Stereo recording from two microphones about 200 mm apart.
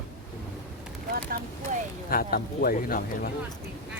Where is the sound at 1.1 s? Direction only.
45° right (ahead or behind).